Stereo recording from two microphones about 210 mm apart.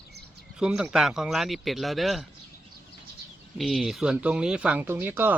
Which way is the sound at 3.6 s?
Centre (ahead or behind).